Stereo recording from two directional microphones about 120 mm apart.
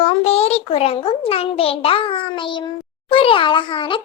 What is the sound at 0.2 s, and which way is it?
A child's voice, 60° left (ahead or behind).